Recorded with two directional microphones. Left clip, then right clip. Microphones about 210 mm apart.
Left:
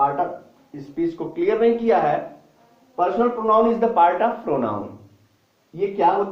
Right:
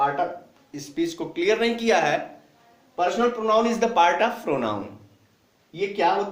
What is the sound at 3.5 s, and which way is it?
Speech, 40° right (ahead or behind).